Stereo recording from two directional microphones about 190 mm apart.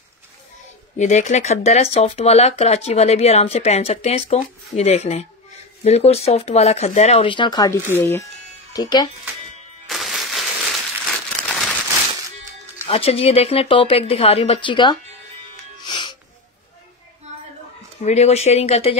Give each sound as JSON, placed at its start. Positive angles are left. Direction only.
{"t": 0.9, "sound": "speech", "side_deg": 40}
{"t": 9.8, "sound": "crumpling", "side_deg": 0}
{"t": 12.8, "sound": "speech", "side_deg": 30}
{"t": 15.8, "sound": "music", "side_deg": 25}
{"t": 18.0, "sound": "speech", "side_deg": 35}